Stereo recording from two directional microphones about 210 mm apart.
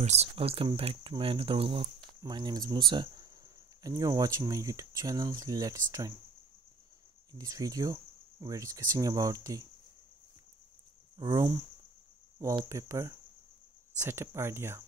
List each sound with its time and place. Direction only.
0.0 s speech: 30° right (ahead or behind)
7.3 s speech: 15° right (ahead or behind)
11.1 s speech: 15° right (ahead or behind)